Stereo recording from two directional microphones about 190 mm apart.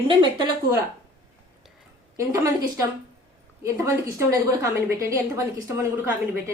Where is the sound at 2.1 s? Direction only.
15° right (ahead or behind).